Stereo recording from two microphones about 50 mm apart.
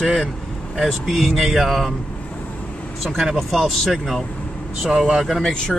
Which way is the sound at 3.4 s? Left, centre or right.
Centre.